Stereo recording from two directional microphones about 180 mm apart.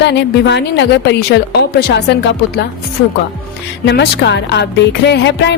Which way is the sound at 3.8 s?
70° left (ahead or behind).